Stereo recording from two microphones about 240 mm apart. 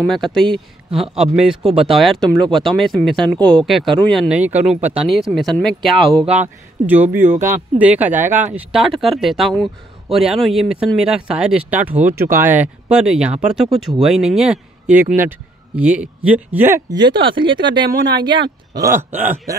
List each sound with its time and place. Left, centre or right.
0.0 s speech: centre
7.4 s speech: right
7.8 s speech: centre